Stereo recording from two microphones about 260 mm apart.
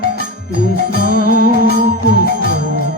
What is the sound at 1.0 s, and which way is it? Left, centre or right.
Music, left.